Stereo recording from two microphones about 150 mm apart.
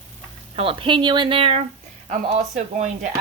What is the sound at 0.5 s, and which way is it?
A woman's voice, 40° right (ahead or behind).